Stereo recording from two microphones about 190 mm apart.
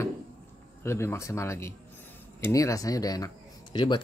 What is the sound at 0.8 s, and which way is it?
Speech, 15° left (ahead or behind).